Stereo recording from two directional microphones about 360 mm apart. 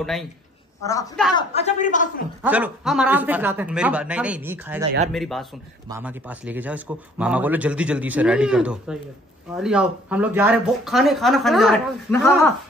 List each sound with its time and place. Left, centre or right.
0.0 s a man's voice: centre
1.3 s a man's voice: centre
2.4 s a man's voice: centre